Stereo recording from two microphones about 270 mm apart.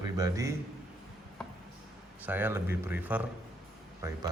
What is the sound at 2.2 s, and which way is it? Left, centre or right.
Speech, centre.